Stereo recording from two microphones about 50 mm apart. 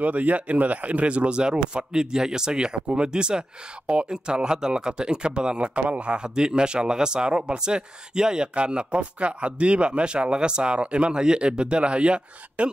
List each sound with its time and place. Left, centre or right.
0.0 s speech: right